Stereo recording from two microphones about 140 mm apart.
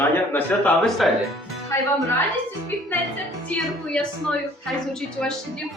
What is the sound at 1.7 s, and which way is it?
Speech, 20° left (ahead or behind).